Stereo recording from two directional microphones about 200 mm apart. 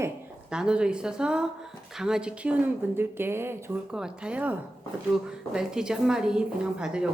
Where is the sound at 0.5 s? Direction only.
5° right (ahead or behind).